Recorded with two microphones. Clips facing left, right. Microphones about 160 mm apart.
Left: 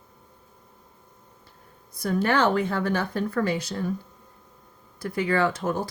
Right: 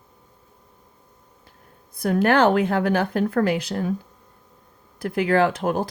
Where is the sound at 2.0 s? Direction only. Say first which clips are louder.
Right 5 dB; 60° right (ahead or behind).